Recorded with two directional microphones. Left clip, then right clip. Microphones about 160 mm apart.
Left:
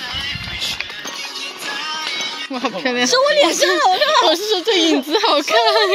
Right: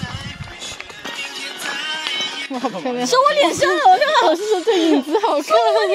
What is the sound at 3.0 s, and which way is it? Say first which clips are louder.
A woman's voice: even; 90° right.